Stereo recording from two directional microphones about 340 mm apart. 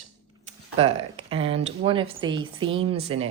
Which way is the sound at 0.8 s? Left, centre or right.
Centre.